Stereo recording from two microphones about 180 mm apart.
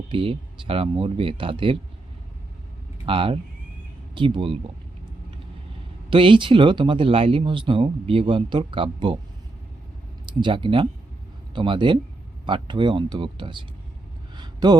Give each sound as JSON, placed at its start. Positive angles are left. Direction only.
{"t": 0.1, "sound": "speech", "side_deg": -30}
{"t": 3.1, "sound": "speech", "side_deg": -30}
{"t": 6.1, "sound": "speech", "side_deg": -30}
{"t": 10.4, "sound": "speech", "side_deg": -30}
{"t": 14.3, "sound": "a sound", "side_deg": -25}